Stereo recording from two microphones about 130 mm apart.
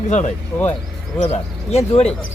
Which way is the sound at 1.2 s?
55° left (ahead or behind).